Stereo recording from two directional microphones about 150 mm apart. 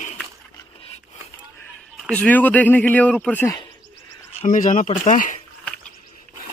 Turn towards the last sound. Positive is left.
turn(degrees=55)  # may be behind; listen again after turning